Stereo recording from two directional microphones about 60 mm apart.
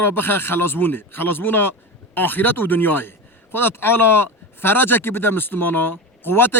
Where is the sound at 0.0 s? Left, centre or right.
Left.